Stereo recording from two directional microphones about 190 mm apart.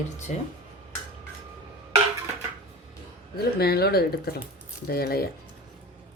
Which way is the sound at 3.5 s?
55° left (ahead or behind).